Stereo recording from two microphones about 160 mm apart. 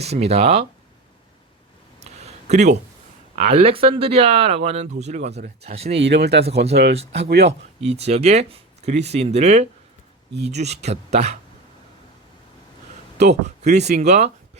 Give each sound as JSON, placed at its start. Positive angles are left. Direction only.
{"t": 0.0, "sound": "speech", "side_deg": -40}
{"t": 2.0, "sound": "a sound", "side_deg": -45}
{"t": 3.5, "sound": "speech", "side_deg": -35}
{"t": 6.0, "sound": "speech", "side_deg": -90}
{"t": 7.8, "sound": "speech", "side_deg": -40}
{"t": 13.1, "sound": "speech", "side_deg": -45}